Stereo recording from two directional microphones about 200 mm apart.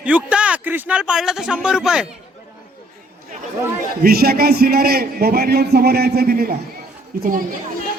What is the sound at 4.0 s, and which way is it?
A man's voice, 50° right (ahead or behind).